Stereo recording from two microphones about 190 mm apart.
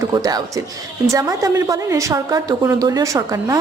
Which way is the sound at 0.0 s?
20° right (ahead or behind).